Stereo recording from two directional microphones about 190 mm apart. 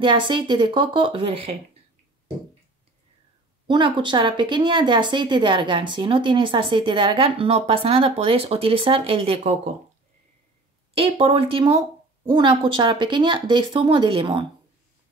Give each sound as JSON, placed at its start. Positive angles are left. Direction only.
{"t": 0.0, "sound": "speech", "side_deg": -25}
{"t": 3.6, "sound": "speech", "side_deg": -25}
{"t": 11.0, "sound": "speech", "side_deg": -30}